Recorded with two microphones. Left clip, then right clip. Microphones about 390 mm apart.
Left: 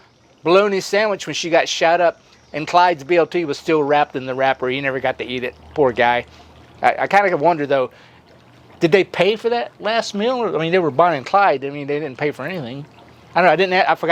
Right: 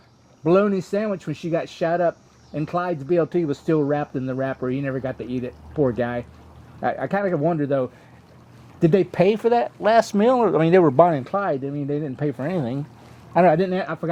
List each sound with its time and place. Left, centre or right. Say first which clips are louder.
0.4 s speech: left 4 dB; left
9.2 s speech: left 1 dB; centre
11.0 s speech: left 5 dB; left
12.4 s speech: right 1 dB; centre
13.3 s speech: left 4 dB; left